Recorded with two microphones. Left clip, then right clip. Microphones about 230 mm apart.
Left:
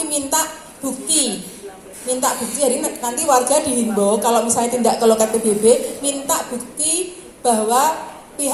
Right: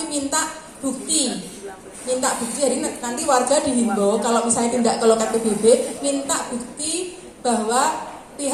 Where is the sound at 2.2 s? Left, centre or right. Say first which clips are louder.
Left 4 dB; left.